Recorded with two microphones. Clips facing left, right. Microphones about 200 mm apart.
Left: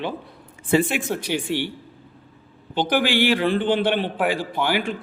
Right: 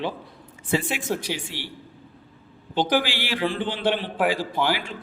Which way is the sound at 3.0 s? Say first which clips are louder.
Left 6 dB; 55° left (ahead or behind).